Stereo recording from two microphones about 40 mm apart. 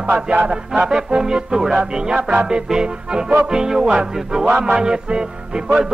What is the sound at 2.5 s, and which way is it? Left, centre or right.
Music, right.